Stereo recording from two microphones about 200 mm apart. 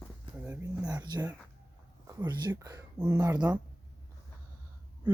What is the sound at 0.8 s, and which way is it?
Whispering, 20° right (ahead or behind).